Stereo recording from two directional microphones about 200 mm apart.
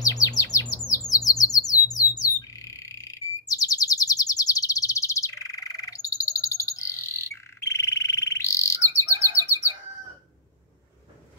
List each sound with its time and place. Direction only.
0.0 s bird: 15° left (ahead or behind)